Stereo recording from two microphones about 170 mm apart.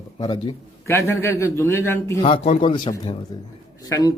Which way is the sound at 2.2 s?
35° left (ahead or behind).